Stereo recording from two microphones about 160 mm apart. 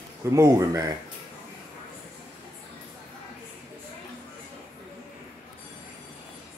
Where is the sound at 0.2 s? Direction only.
20° right (ahead or behind).